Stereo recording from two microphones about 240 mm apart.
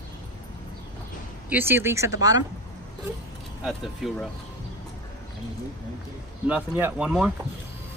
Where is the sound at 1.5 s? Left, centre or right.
Centre.